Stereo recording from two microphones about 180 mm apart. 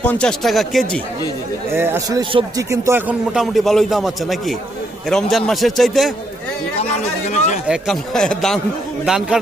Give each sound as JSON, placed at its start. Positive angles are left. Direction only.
{"t": 0.0, "sound": "speech", "side_deg": 5}
{"t": 1.7, "sound": "speech", "side_deg": -15}
{"t": 7.3, "sound": "speech", "side_deg": 40}
{"t": 7.7, "sound": "speech", "side_deg": 0}